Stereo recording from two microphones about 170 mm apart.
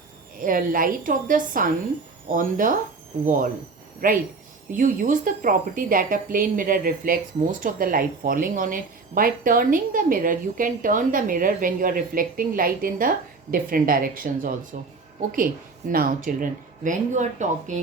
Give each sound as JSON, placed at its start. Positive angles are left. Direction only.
{"t": 0.3, "sound": "speech", "side_deg": -55}
{"t": 15.9, "sound": "speech", "side_deg": -55}